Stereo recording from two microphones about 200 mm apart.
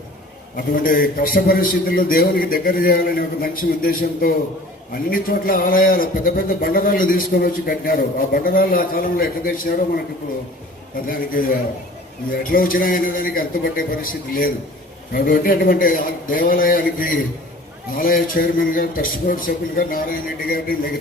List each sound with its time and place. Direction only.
0.5 s a man's voice: 45° left (ahead or behind)
12.3 s a man's voice: 45° left (ahead or behind)